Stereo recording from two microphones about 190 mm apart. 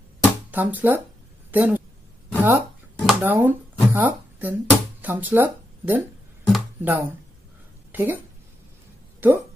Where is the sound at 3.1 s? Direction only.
10° right (ahead or behind).